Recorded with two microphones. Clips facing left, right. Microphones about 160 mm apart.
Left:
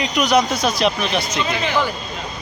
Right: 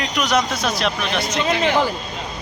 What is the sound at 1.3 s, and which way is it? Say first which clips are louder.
Speech: right 3 dB; 65° right (ahead or behind).